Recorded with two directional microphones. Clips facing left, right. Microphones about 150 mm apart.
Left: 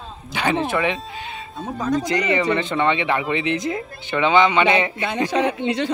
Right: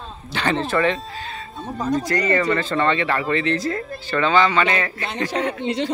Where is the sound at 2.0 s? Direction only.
15° left (ahead or behind).